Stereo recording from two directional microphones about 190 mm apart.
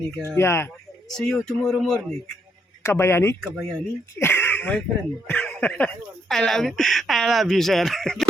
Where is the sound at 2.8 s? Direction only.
15° left (ahead or behind).